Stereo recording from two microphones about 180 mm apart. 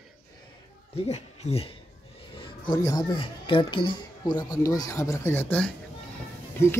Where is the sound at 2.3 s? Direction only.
30° left (ahead or behind).